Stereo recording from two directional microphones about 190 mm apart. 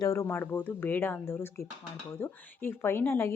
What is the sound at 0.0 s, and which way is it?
Speech, 15° left (ahead or behind).